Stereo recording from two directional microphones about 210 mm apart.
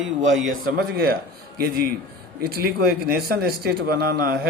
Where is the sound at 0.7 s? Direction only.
45° right (ahead or behind).